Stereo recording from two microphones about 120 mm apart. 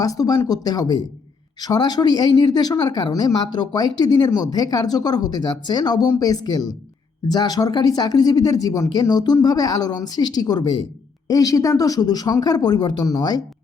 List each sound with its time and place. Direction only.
0.0 s speech: 30° left (ahead or behind)